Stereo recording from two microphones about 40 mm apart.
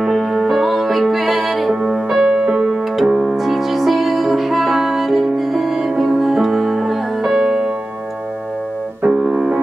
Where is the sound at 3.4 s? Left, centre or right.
Centre.